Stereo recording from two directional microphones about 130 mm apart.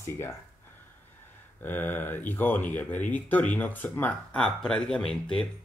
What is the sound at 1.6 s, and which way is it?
Speech, 15° left (ahead or behind).